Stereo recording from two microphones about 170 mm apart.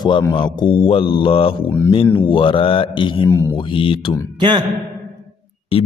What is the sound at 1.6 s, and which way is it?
Speech, 15° left (ahead or behind).